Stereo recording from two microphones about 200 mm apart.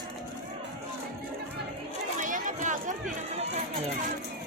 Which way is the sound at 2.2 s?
40° right (ahead or behind).